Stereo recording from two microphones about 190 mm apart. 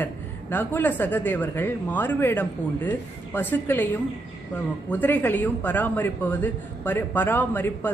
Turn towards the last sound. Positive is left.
turn(degrees=10)  # may be behind; listen again after turning